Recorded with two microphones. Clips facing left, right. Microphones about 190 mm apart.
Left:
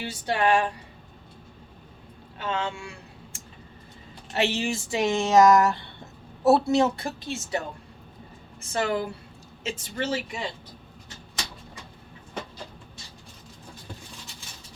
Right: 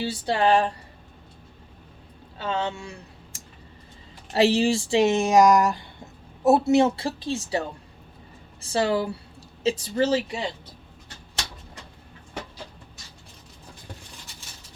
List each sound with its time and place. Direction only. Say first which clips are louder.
0.0 s speech: right 2 dB; 30° right (ahead or behind)
2.4 s speech: right 2 dB; 35° right (ahead or behind)
4.3 s speech: right 6 dB; 35° right (ahead or behind)
8.6 s speech: right 3 dB; 35° right (ahead or behind)